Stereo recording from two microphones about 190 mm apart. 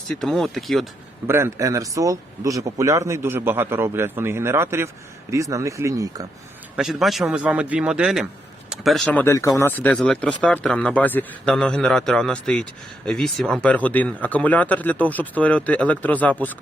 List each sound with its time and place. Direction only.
0.2 s speech: centre (ahead or behind)
1.3 s speech: 15° right (ahead or behind)
6.7 s speech: centre (ahead or behind)
9.2 s speech: 15° left (ahead or behind)